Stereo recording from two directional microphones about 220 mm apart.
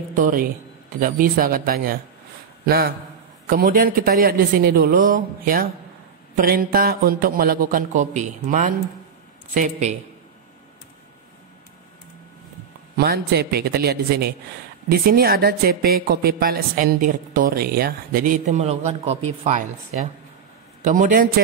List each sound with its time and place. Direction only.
0.1 s a man's voice: 40° right (ahead or behind)
12.9 s a man's voice: 45° right (ahead or behind)